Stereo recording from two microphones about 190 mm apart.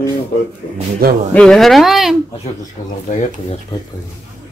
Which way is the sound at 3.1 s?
40° left (ahead or behind).